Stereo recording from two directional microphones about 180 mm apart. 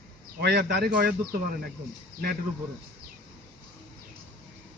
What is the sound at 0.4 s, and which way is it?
Speech, 65° right (ahead or behind).